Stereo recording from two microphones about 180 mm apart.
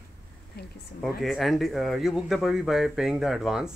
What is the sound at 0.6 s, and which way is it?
Speech, 60° left (ahead or behind).